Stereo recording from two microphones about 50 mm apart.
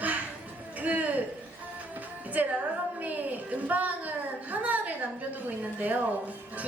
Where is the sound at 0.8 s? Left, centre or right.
Right.